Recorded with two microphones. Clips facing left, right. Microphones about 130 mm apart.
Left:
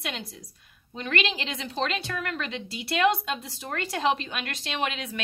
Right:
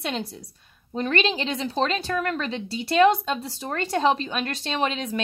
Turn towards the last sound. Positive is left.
turn(degrees=-35)  # may be behind; listen again after turning